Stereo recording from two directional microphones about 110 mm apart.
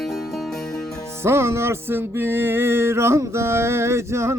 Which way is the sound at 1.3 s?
25° right (ahead or behind).